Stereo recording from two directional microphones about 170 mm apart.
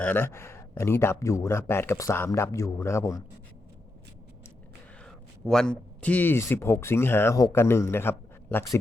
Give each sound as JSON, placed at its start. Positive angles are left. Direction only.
{"t": 0.0, "sound": "speech", "side_deg": 10}
{"t": 5.0, "sound": "a man's voice", "side_deg": 5}